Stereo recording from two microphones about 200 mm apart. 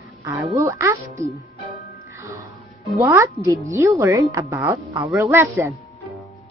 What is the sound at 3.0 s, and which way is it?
Speech, 15° right (ahead or behind).